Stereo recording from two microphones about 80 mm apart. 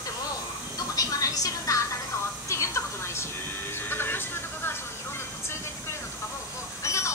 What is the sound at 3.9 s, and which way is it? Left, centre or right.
Vehicle, left.